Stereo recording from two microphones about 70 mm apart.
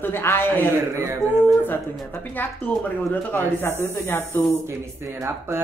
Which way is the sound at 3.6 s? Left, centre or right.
Left.